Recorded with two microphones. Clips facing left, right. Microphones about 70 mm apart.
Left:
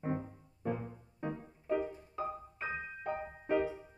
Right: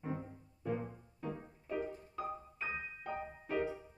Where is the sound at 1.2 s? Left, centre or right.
Left.